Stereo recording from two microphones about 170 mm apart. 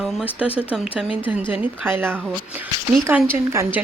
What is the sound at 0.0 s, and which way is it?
A woman's voice, centre (ahead or behind).